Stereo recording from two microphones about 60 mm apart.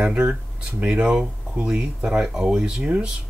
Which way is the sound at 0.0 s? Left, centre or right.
Centre.